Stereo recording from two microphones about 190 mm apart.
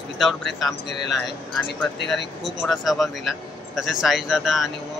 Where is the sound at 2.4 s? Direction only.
Centre (ahead or behind).